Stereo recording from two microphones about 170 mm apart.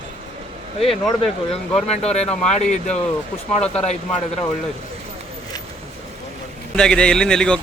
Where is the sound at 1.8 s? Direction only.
40° left (ahead or behind).